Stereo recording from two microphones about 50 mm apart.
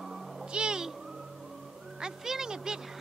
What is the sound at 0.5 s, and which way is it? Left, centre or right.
Meow, centre.